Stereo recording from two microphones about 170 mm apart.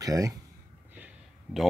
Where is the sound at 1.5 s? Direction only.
5° right (ahead or behind).